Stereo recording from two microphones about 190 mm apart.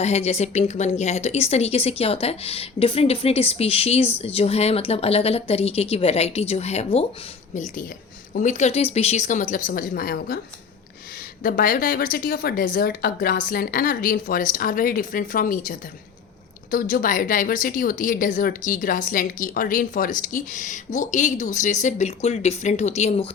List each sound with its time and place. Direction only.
0.0 s a woman's voice: 35° left (ahead or behind); by 10.4 s 55° left (ahead or behind)
11.4 s a woman's voice: 45° left (ahead or behind)